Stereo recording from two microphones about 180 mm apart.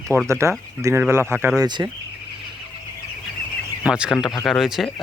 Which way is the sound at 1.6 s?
20° right (ahead or behind).